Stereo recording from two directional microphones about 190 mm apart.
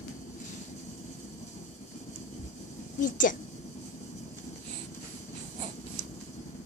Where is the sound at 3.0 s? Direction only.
45° left (ahead or behind).